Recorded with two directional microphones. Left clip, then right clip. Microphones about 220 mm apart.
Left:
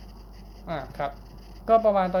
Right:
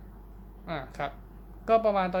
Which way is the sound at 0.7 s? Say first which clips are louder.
Left 4 dB; 25° right (ahead or behind).